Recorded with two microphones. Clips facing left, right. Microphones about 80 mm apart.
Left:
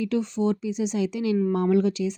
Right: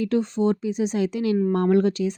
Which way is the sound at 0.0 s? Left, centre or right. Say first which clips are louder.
Right 3 dB; right.